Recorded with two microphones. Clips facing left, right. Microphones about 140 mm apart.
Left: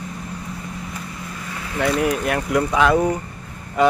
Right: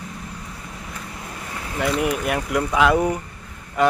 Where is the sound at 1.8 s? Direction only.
5° right (ahead or behind).